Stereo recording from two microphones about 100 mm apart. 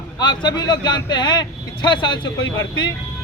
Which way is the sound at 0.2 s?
45° left (ahead or behind).